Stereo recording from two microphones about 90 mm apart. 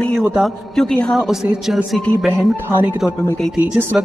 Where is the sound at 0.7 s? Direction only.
10° left (ahead or behind).